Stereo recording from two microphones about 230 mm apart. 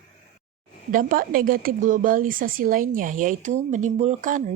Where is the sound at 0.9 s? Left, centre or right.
Right.